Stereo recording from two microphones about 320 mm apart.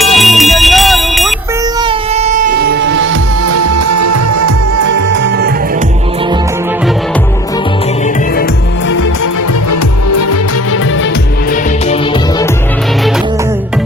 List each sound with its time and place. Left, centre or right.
0.0 s jingle bell: centre
1.9 s a sound: centre
3.4 s music: right
4.9 s music: right